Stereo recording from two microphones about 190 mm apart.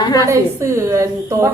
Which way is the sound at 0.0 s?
20° left (ahead or behind).